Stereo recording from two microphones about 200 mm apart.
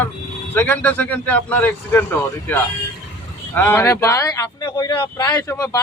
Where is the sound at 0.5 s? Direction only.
10° left (ahead or behind).